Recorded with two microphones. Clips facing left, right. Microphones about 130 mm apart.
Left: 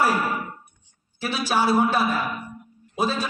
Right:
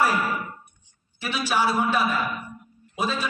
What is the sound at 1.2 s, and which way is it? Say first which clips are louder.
A man's voice: left 1 dB; 35° left (ahead or behind).